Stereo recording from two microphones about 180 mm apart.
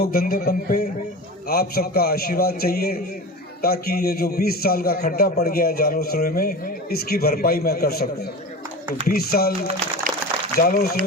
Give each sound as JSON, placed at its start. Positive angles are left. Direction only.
{"t": 0.0, "sound": "a man's voice", "side_deg": 55}
{"t": 10.6, "sound": "a man's voice", "side_deg": 55}